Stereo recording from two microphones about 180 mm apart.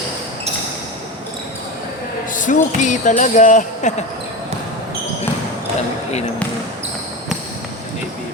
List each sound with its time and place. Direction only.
2.3 s speech: 45° left (ahead or behind)